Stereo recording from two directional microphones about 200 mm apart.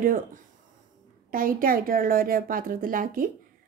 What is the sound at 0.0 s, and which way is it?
A woman's voice, 45° right (ahead or behind).